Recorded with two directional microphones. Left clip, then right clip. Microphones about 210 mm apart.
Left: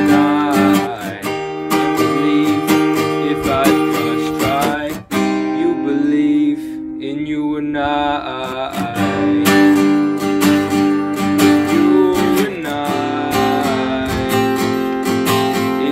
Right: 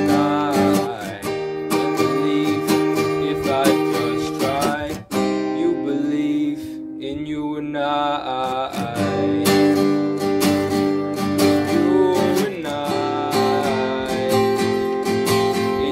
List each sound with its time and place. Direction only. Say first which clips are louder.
0.0 s music: left 5 dB; 5° left (ahead or behind)
1.7 s music: left 5 dB; 10° left (ahead or behind)
6.1 s music: left 7 dB; centre (ahead or behind)
7.8 s mantra: left 3 dB; centre (ahead or behind)
9.4 s music: left 5 dB; 10° left (ahead or behind)